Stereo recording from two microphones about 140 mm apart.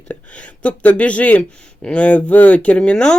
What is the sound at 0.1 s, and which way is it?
Speech, 10° left (ahead or behind).